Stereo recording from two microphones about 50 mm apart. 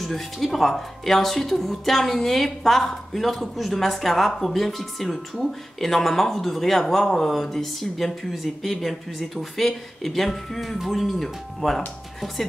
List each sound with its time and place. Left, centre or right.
0.0 s speech: centre